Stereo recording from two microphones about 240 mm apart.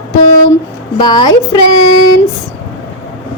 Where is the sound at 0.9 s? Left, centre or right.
Centre.